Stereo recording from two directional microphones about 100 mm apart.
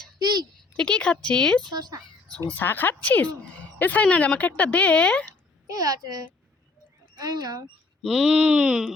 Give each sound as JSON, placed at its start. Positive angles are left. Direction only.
{"t": 0.2, "sound": "a child's voice", "side_deg": -45}
{"t": 0.8, "sound": "speech", "side_deg": 10}
{"t": 1.6, "sound": "speech", "side_deg": -45}
{"t": 2.5, "sound": "a woman's voice", "side_deg": 20}
{"t": 5.7, "sound": "a child's voice", "side_deg": -40}
{"t": 8.0, "sound": "speech", "side_deg": 0}